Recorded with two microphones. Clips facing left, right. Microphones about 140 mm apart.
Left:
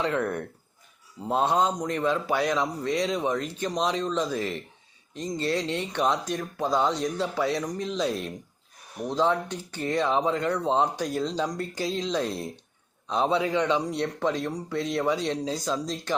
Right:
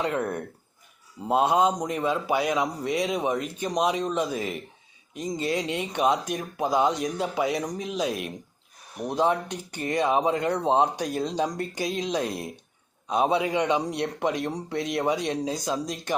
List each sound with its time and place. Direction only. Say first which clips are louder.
1.3 s speech: right 2 dB; 10° right (ahead or behind)